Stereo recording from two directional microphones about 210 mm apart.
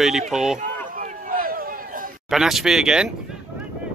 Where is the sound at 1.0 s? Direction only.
40° right (ahead or behind).